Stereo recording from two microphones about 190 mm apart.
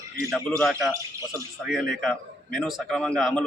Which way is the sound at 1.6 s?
Centre (ahead or behind).